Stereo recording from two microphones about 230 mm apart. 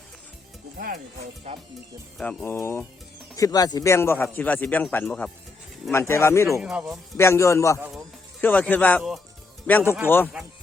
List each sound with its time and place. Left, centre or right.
1.5 s speech: right
2.1 s a man's voice: centre
6.6 s speech: centre
7.2 s a man's voice: centre
7.8 s a man's voice: centre